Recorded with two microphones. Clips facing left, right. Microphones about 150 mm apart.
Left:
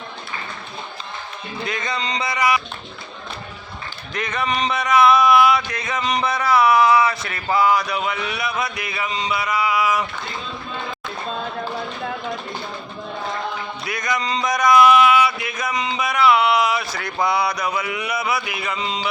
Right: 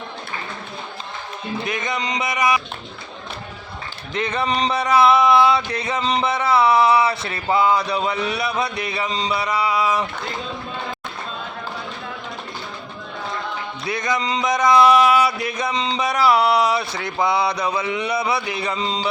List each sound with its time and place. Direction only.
1.6 s speech: 20° right (ahead or behind)
4.1 s speech: 30° right (ahead or behind)
13.8 s speech: 30° right (ahead or behind)